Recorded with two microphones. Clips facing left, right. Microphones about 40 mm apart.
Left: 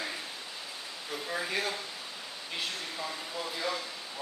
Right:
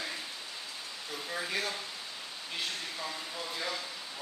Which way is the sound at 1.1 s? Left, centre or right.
Centre.